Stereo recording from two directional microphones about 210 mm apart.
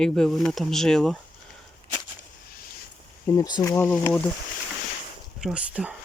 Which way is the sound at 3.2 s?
15° left (ahead or behind).